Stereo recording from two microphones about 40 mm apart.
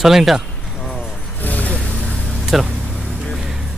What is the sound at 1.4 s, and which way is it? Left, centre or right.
Vehicle, left.